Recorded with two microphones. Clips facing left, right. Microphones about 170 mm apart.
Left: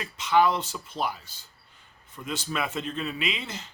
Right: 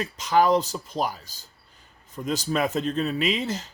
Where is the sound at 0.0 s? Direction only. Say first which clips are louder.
Right 1 dB; 40° right (ahead or behind).